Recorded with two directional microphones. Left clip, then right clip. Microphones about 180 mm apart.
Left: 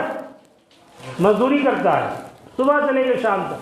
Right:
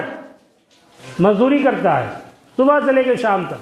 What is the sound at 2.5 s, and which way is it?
Speech, 60° right (ahead or behind).